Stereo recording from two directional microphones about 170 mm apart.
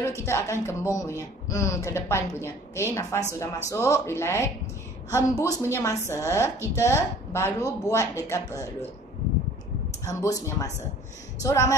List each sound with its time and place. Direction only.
0.0 s a woman's voice: 15° left (ahead or behind)
10.0 s a woman's voice: 20° left (ahead or behind)